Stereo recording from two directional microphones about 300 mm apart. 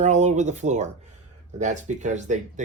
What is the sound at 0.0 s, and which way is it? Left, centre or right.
Speech, right.